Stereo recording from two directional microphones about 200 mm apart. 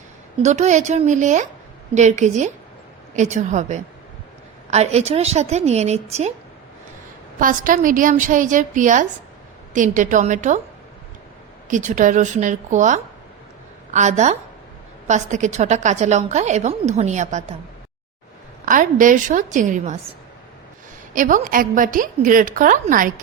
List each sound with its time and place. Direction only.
0.4 s a woman's voice: 35° right (ahead or behind)
7.3 s a woman's voice: 45° right (ahead or behind)
11.7 s a woman's voice: 40° right (ahead or behind)
18.6 s a woman's voice: 40° right (ahead or behind)
21.1 s a woman's voice: 40° right (ahead or behind)